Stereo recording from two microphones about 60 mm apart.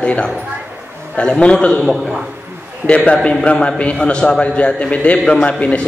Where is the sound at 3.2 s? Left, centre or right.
Centre.